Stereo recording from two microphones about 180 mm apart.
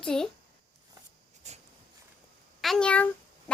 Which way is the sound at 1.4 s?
40° right (ahead or behind).